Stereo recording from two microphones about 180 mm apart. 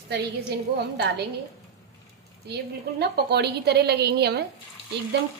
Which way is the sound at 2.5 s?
65° right (ahead or behind).